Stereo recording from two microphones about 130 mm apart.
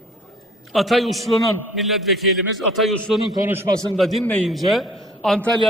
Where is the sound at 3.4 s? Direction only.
20° right (ahead or behind).